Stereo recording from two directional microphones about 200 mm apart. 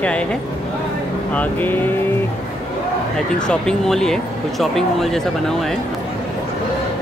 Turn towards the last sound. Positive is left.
turn(degrees=0)  # may be behind; listen again after turning